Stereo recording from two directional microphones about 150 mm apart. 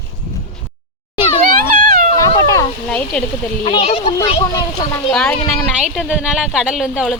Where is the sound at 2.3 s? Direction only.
25° left (ahead or behind).